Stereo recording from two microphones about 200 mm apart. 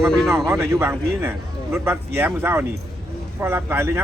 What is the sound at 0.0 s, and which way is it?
Speech, centre (ahead or behind).